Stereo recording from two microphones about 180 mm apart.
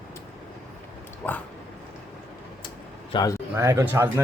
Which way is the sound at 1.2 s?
10° left (ahead or behind).